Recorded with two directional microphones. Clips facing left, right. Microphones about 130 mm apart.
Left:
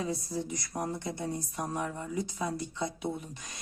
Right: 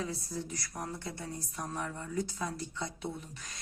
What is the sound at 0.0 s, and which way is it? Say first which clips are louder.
Speech: left 4 dB; 15° left (ahead or behind).